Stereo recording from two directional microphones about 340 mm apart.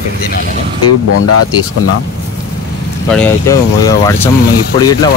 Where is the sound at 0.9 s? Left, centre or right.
Left.